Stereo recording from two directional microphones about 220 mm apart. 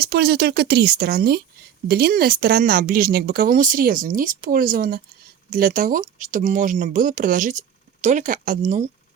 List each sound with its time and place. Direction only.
0.0 s speech: 45° right (ahead or behind)